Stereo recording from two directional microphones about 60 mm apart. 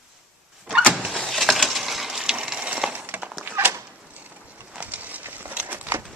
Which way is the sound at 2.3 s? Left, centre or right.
Centre.